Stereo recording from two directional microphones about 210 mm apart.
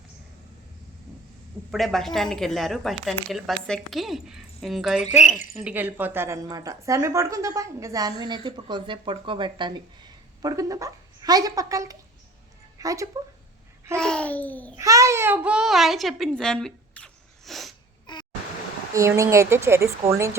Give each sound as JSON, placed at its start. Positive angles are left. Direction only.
{"t": 1.7, "sound": "a woman's voice", "side_deg": 0}
{"t": 14.0, "sound": "speech", "side_deg": 5}
{"t": 14.8, "sound": "a child's voice", "side_deg": -15}
{"t": 18.0, "sound": "a sound", "side_deg": 20}
{"t": 18.9, "sound": "a woman's voice", "side_deg": -15}